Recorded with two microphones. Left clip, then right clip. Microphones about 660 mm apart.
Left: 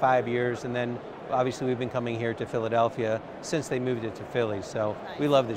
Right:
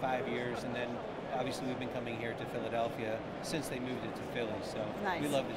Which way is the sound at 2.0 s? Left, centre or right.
Left.